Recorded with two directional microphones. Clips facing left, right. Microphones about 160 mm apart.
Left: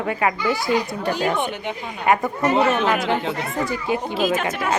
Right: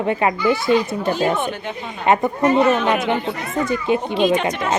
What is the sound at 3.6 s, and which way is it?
Speech, 20° right (ahead or behind).